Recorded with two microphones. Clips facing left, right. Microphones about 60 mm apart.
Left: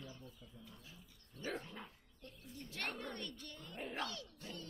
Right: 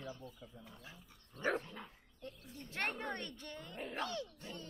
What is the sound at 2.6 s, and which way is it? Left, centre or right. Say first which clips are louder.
A woman's voice: right 4 dB; right.